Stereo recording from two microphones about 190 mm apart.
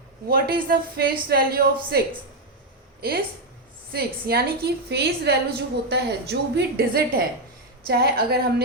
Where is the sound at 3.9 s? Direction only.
55° right (ahead or behind).